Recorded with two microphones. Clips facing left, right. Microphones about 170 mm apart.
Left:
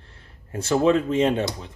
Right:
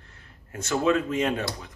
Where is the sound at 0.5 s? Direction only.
30° left (ahead or behind).